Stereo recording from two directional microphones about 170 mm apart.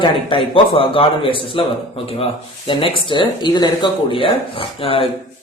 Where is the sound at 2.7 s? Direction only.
30° left (ahead or behind).